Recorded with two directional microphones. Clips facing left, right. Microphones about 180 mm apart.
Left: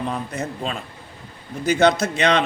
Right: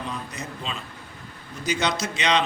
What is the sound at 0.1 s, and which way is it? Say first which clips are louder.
A man's voice: left 7 dB; 55° left (ahead or behind).